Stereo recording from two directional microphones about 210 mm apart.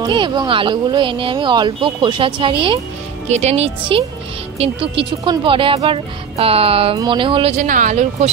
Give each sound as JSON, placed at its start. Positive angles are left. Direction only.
{"t": 0.0, "sound": "speech", "side_deg": -20}
{"t": 7.5, "sound": "speech", "side_deg": -35}